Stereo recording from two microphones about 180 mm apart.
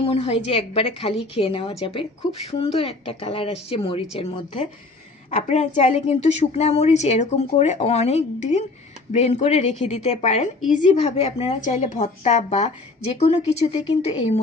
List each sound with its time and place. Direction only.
0.0 s a woman's voice: 35° left (ahead or behind)